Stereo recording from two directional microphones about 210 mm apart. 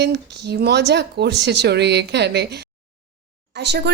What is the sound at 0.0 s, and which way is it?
Speech, 55° right (ahead or behind).